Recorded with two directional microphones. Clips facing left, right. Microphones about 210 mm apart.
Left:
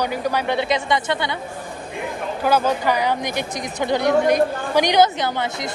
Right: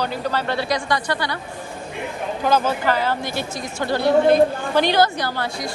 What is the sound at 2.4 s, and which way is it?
Speech, 10° left (ahead or behind).